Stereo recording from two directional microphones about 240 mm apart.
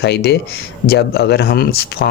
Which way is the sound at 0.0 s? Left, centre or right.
Left.